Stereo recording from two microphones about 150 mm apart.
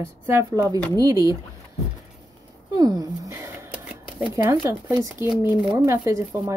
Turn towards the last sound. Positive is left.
turn(degrees=-20)  # may be behind; listen again after turning